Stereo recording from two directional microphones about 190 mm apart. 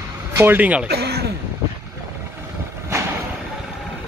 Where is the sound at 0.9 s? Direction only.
60° right (ahead or behind).